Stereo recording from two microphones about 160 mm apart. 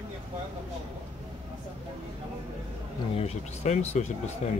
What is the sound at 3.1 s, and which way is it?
Speech, 40° left (ahead or behind).